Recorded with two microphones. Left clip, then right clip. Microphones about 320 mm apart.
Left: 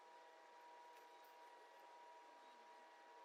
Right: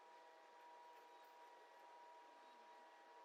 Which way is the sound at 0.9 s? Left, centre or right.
Centre.